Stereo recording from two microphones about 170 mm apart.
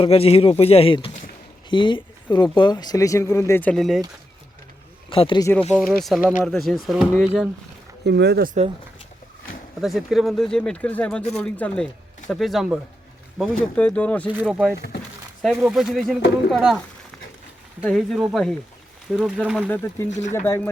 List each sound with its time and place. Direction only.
0.0 s speech: 35° left (ahead or behind); by 4.0 s centre (ahead or behind)
5.0 s speech: 30° left (ahead or behind)
5.4 s speech: 15° left (ahead or behind)
5.7 s speech: centre (ahead or behind)
8.0 s speech: 85° right
9.8 s speech: centre (ahead or behind)
14.3 s speech: 10° right (ahead or behind)
17.8 s speech: centre (ahead or behind)
19.7 s speech: 15° left (ahead or behind)